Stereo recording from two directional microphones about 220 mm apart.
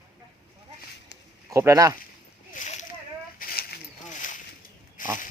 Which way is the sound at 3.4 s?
45° left (ahead or behind).